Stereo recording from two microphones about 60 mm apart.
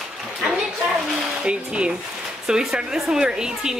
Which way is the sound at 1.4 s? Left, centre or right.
Centre.